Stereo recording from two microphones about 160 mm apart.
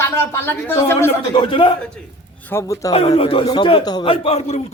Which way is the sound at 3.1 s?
35° left (ahead or behind).